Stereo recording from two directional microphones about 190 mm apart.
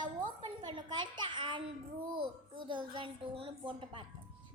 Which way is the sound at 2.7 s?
25° right (ahead or behind).